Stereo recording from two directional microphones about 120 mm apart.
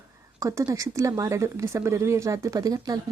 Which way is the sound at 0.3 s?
25° right (ahead or behind).